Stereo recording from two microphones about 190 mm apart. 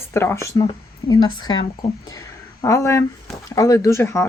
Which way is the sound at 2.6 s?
15° left (ahead or behind).